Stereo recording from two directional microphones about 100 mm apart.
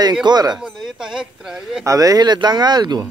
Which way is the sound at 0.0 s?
45° right (ahead or behind).